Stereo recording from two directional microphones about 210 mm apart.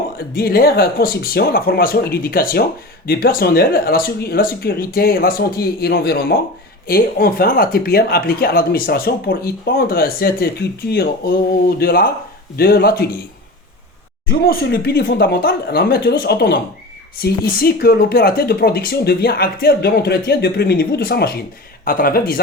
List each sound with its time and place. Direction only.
0.2 s speech: 45° left (ahead or behind)
14.3 s speech: 45° left (ahead or behind)